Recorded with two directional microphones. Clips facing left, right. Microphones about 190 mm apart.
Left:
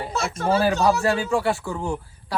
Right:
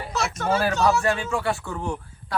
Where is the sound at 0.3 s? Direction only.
30° left (ahead or behind).